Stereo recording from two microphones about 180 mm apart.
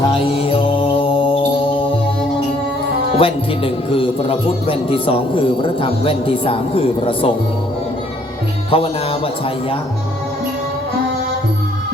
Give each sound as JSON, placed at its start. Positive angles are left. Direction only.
{"t": 0.1, "sound": "music", "side_deg": 30}
{"t": 3.2, "sound": "a man's voice", "side_deg": 30}
{"t": 8.7, "sound": "a man's voice", "side_deg": 30}